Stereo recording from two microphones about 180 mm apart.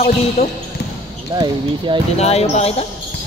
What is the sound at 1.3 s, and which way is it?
Speech, 25° right (ahead or behind).